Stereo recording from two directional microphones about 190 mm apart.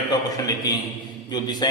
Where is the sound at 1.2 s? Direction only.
20° left (ahead or behind).